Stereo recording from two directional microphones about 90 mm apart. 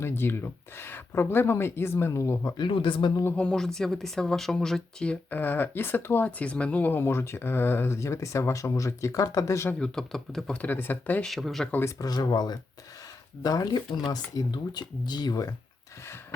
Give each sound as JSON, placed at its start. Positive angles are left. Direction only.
{"t": 0.0, "sound": "speech", "side_deg": 25}
{"t": 2.6, "sound": "speech", "side_deg": 70}
{"t": 3.2, "sound": "speech", "side_deg": 15}
{"t": 3.6, "sound": "speech", "side_deg": 5}
{"t": 5.3, "sound": "speech", "side_deg": 20}
{"t": 9.7, "sound": "speech", "side_deg": 10}
{"t": 11.2, "sound": "speech", "side_deg": 0}
{"t": 11.9, "sound": "speech", "side_deg": 45}